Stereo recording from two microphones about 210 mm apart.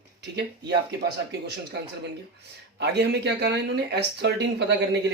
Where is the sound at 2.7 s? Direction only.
50° right (ahead or behind).